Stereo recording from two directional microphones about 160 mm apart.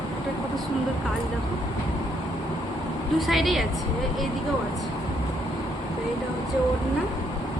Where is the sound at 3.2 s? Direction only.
Centre (ahead or behind).